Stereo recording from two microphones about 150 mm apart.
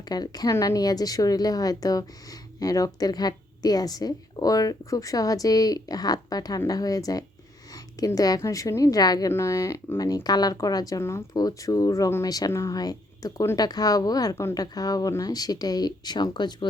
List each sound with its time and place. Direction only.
0.1 s a woman's voice: 25° left (ahead or behind)